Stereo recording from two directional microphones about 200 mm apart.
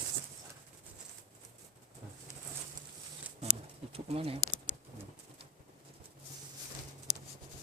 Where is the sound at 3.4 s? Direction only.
30° right (ahead or behind).